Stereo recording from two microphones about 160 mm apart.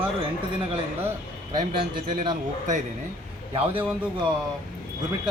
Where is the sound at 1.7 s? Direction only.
60° right (ahead or behind).